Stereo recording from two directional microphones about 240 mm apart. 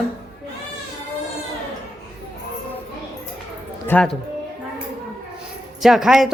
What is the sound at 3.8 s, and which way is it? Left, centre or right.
Speech, centre.